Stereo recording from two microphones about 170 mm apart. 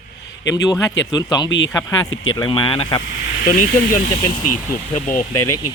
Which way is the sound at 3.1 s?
65° left (ahead or behind).